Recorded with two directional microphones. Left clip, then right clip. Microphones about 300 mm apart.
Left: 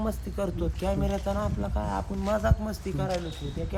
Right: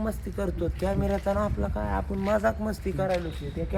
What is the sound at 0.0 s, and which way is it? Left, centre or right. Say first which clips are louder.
Speech: even; centre.